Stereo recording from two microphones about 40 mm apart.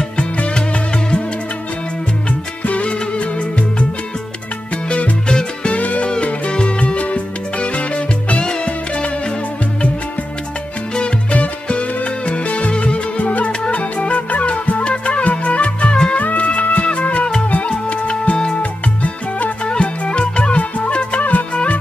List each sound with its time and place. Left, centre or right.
0.2 s music: left
2.6 s music: left
4.8 s music: left
11.3 s music: left
19.7 s music: left